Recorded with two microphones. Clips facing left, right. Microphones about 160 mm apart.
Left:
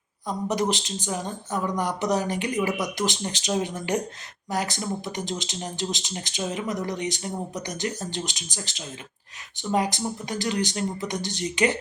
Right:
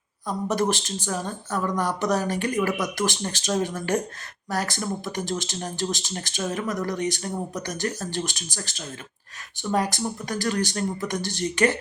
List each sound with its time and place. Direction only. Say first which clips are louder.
0.3 s speech: right 1 dB; 15° left (ahead or behind)